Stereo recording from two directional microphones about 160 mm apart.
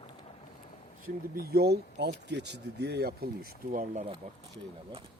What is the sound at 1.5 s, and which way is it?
Speech, 85° right.